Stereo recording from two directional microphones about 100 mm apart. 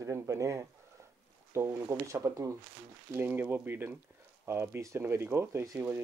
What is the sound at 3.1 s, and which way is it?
Speech, 20° right (ahead or behind).